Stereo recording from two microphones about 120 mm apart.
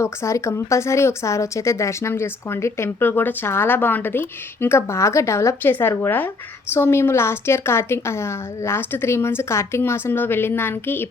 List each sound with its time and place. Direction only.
0.0 s speech: 25° left (ahead or behind)